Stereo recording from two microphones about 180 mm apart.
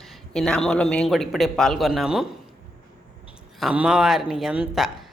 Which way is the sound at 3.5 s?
5° right (ahead or behind).